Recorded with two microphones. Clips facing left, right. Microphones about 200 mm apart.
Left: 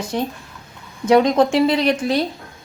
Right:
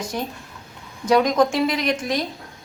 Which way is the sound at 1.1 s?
25° left (ahead or behind).